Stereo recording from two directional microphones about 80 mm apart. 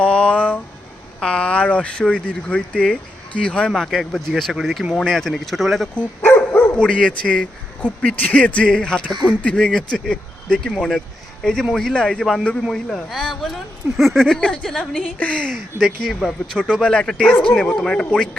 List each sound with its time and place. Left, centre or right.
0.0 s a sound: centre
1.2 s speech: centre
3.7 s speech: centre
6.2 s dog: left
6.7 s speech: centre